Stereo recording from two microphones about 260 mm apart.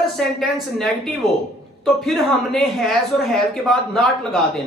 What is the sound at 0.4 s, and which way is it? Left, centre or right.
Speech, centre.